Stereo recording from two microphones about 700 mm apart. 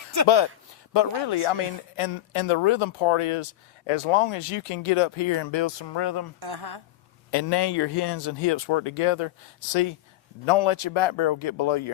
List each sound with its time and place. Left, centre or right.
0.9 s speech: left
6.4 s a woman's voice: right
7.3 s speech: left